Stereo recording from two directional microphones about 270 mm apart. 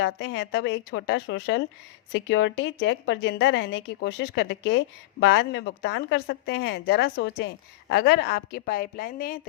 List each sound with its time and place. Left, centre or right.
0.0 s a woman's voice: left